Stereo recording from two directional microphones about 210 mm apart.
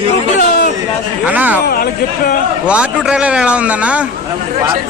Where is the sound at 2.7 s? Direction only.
5° right (ahead or behind).